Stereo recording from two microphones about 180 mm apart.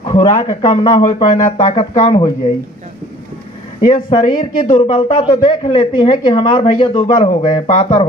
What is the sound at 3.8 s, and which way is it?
Speech, 45° left (ahead or behind).